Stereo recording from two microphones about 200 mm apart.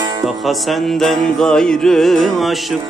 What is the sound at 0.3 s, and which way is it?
Music, centre (ahead or behind).